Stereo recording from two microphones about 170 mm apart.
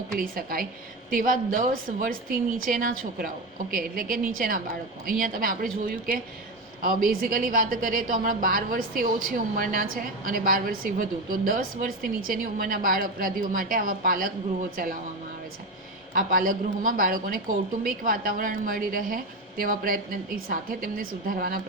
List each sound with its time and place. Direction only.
0.1 s a woman's voice: 60° right (ahead or behind)
6.8 s a woman's voice: 55° right (ahead or behind)
16.1 s a woman's voice: 55° right (ahead or behind)